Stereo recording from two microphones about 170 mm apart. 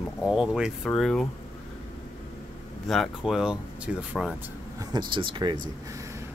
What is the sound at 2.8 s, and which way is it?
Speech, centre (ahead or behind).